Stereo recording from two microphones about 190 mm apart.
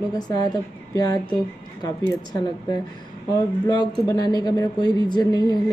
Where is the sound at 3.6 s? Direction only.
20° left (ahead or behind).